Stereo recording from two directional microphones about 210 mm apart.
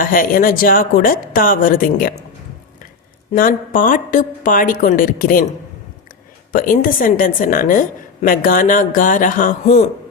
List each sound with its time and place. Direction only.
0.0 s a woman's voice: 40° left (ahead or behind)
3.3 s a woman's voice: 40° left (ahead or behind)
6.5 s a woman's voice: 40° left (ahead or behind)